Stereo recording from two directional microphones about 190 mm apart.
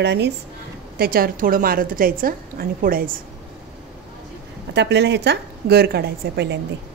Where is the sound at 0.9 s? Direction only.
50° right (ahead or behind).